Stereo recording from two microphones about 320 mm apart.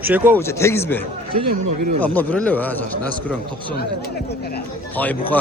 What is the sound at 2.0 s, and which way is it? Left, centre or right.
A man's voice, centre.